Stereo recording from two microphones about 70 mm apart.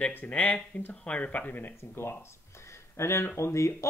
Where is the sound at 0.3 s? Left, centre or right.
Left.